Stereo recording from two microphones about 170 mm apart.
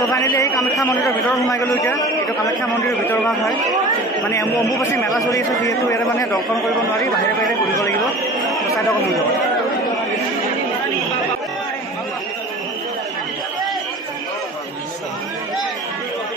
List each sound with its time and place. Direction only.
0.1 s a man's voice: 20° left (ahead or behind)
4.3 s a man's voice: 20° left (ahead or behind)